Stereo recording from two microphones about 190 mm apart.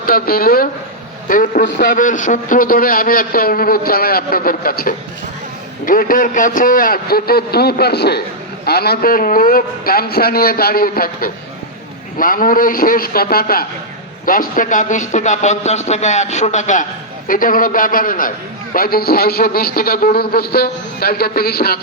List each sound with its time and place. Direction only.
0.0 s a man's voice: 50° left (ahead or behind)